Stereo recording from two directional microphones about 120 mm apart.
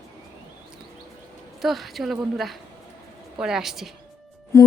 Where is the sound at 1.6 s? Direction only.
Centre (ahead or behind).